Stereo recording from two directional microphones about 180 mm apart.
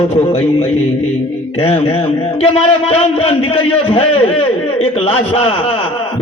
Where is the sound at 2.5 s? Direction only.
35° left (ahead or behind).